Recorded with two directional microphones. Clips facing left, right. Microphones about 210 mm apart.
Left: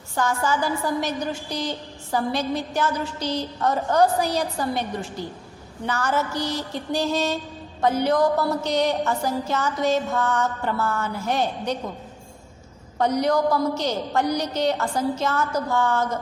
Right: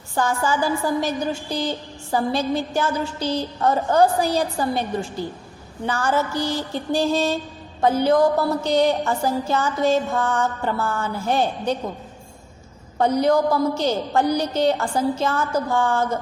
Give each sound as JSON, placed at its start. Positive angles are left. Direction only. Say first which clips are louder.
{"t": 0.1, "sound": "a woman's voice", "louder": "right 2 dB", "side_deg": -30}
{"t": 13.0, "sound": "a woman's voice", "louder": "right 3 dB", "side_deg": -30}